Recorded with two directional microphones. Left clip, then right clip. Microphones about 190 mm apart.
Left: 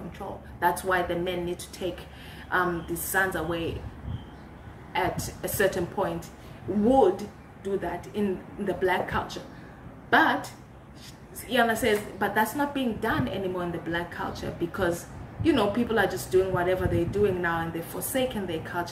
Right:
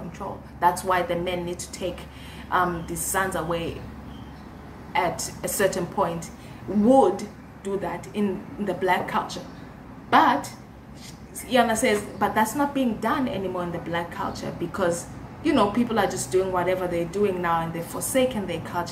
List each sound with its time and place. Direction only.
0.6 s a woman's voice: 10° left (ahead or behind)
3.1 s a woman's voice: 10° left (ahead or behind)
4.9 s a woman's voice: 10° left (ahead or behind)
7.6 s a woman's voice: 5° left (ahead or behind)
11.5 s a woman's voice: 10° left (ahead or behind)